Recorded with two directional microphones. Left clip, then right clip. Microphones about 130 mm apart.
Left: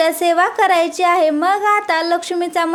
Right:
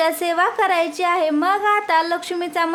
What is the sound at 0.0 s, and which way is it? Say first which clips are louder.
Speech: left 4 dB; 30° left (ahead or behind).